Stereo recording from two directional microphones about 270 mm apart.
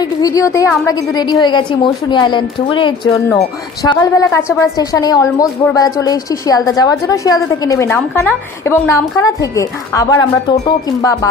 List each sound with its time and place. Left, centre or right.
0.0 s a woman's voice: centre